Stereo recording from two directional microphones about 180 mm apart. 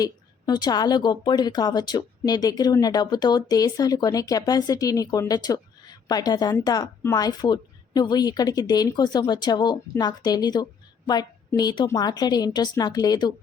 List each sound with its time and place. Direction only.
0.0 s a woman's voice: 20° left (ahead or behind)